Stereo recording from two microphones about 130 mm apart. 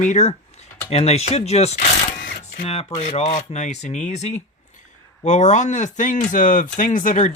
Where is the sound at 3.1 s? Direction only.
55° left (ahead or behind).